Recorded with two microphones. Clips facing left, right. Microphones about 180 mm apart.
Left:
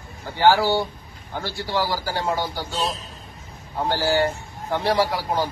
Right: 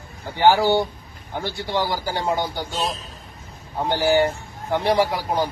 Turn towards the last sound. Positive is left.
turn(degrees=-15)  # may be behind; listen again after turning